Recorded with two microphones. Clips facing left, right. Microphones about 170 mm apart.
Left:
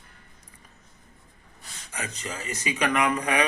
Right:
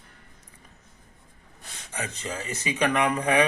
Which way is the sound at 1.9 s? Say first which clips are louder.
Right 2 dB; 30° right (ahead or behind).